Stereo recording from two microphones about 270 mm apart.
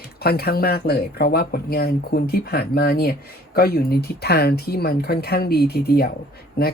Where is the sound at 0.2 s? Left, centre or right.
Left.